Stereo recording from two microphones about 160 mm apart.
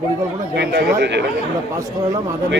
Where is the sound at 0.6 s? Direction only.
90° right.